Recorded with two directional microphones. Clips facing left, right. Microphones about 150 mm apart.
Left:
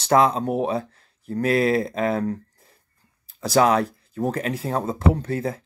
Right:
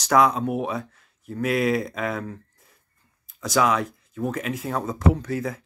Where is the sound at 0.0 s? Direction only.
30° left (ahead or behind).